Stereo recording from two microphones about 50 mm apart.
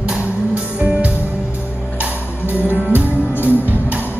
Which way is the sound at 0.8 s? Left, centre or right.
Right.